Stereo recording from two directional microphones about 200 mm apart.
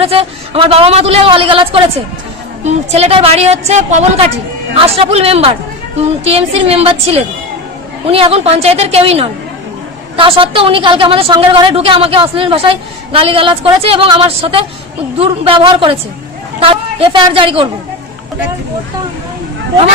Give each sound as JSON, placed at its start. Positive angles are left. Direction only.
{"t": 0.0, "sound": "a woman's voice", "side_deg": -30}